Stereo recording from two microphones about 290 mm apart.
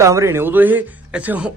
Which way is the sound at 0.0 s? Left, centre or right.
Centre.